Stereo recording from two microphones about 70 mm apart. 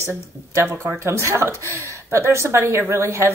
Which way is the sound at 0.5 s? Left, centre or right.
Right.